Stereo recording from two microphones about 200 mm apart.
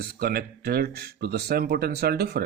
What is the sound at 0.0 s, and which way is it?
Speech, 45° right (ahead or behind).